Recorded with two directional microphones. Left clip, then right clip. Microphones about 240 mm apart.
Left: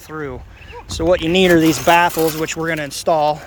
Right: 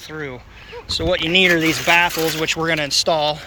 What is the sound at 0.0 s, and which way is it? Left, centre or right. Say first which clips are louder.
Speech: left 2 dB; left.